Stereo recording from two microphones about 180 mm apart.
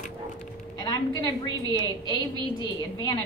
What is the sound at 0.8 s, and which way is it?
A woman's voice, 20° left (ahead or behind).